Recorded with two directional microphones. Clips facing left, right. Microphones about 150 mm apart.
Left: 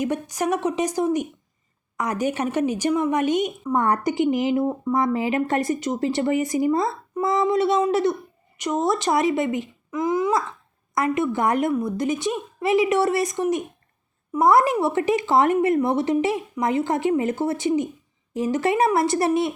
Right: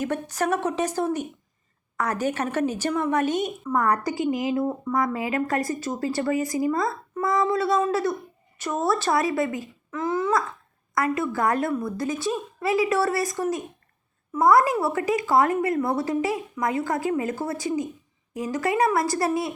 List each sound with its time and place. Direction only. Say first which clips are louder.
0.0 s a woman's voice: left 2 dB; 15° left (ahead or behind)